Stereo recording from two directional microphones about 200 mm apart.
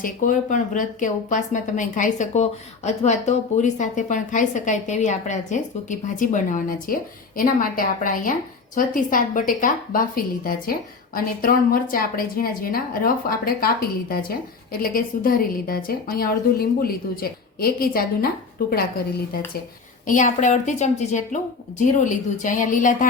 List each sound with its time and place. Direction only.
0.0 s a woman's voice: 40° left (ahead or behind)
20.1 s speech: 40° left (ahead or behind)